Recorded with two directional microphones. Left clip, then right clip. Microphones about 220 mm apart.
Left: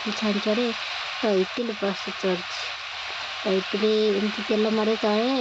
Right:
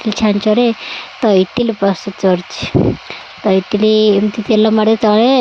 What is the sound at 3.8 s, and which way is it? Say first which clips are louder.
Speech: right 11 dB; 40° right (ahead or behind).